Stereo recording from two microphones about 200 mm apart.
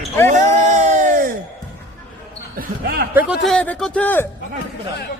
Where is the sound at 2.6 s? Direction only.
50° right (ahead or behind).